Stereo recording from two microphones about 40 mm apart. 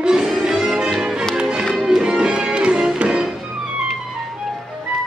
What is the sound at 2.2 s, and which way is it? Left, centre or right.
Music, right.